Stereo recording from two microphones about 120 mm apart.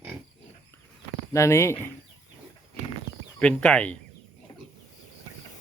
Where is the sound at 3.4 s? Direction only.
10° left (ahead or behind).